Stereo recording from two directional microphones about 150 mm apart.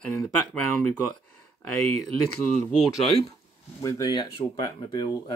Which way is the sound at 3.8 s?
20° left (ahead or behind).